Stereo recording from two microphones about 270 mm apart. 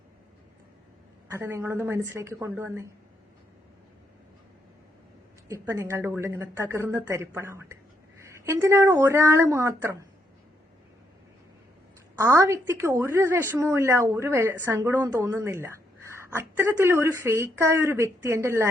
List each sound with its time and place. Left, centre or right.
1.3 s a woman's voice: centre
5.5 s a woman's voice: centre
12.1 s a woman's voice: centre